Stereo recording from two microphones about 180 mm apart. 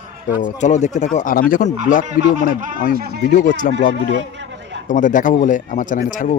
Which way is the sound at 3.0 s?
60° right (ahead or behind).